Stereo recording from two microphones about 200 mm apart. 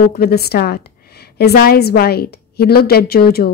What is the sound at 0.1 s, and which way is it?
A woman's voice, 50° left (ahead or behind).